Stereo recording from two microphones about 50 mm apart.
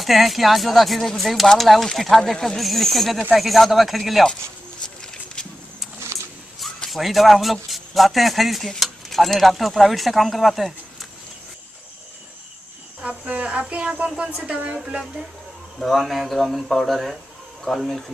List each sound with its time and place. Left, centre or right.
0.0 s speech: centre
5.0 s a sound: centre
6.9 s speech: centre
13.3 s speech: right
15.8 s speech: centre